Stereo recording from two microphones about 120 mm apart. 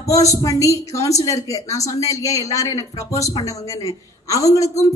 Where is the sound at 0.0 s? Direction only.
25° left (ahead or behind).